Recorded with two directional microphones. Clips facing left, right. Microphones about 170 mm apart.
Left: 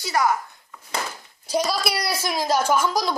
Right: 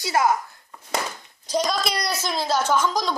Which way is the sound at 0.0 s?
20° right (ahead or behind).